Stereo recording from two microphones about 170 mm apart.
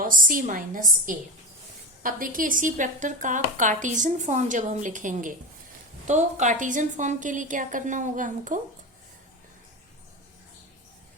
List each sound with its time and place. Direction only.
0.0 s a woman's voice: 55° right (ahead or behind)